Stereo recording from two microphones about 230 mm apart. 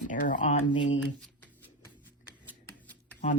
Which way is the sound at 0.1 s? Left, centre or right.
Left.